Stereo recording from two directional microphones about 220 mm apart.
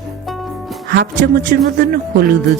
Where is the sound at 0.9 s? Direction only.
45° right (ahead or behind).